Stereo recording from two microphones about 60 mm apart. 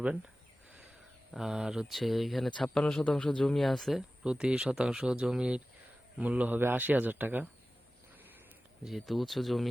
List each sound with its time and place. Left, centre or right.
1.3 s speech: centre
2.7 s a man's voice: centre
4.2 s a man's voice: centre
6.6 s speech: right
8.8 s speech: centre